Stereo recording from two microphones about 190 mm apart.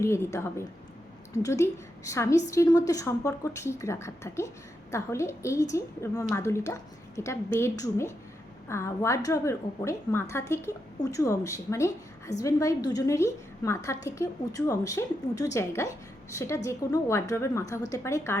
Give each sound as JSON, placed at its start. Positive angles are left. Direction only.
{"t": 0.0, "sound": "a woman's voice", "side_deg": 15}